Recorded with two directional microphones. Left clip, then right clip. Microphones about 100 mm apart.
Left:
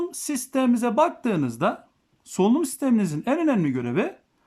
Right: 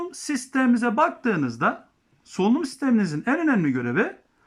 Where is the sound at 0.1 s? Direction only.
30° left (ahead or behind).